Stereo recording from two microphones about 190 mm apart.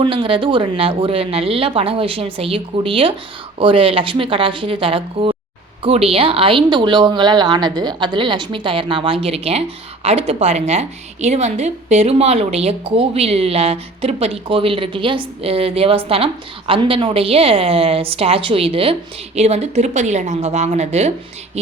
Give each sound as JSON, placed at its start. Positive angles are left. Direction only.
{"t": 0.0, "sound": "speech", "side_deg": -25}